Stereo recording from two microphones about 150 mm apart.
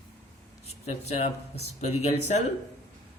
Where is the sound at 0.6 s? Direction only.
45° left (ahead or behind).